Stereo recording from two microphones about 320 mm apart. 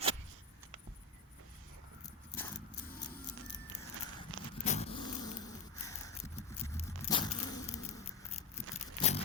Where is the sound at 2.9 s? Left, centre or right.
Left.